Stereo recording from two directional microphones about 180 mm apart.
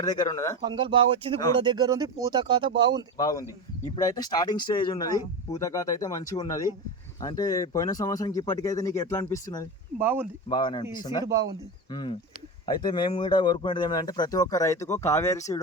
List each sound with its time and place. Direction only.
0.0 s speech: 20° left (ahead or behind)
0.6 s speech: 25° right (ahead or behind)
3.2 s speech: 20° left (ahead or behind)
10.0 s speech: 10° right (ahead or behind)
10.5 s speech: 25° left (ahead or behind)